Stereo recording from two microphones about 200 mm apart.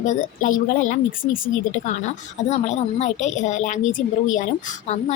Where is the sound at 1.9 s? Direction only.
35° left (ahead or behind).